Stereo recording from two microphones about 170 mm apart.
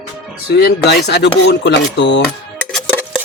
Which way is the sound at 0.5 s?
75° left (ahead or behind).